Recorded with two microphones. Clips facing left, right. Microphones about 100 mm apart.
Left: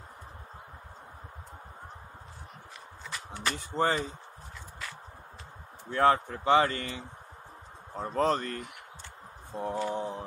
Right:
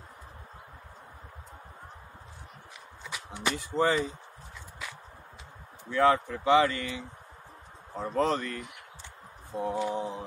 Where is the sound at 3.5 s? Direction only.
40° left (ahead or behind).